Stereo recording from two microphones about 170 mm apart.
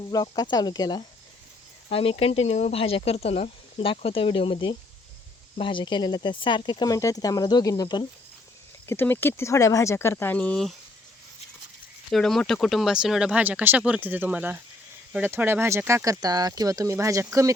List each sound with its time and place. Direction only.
0.1 s speech: 20° left (ahead or behind)
8.9 s speech: 10° left (ahead or behind)
12.1 s speech: 5° left (ahead or behind); by 17.5 s 15° right (ahead or behind)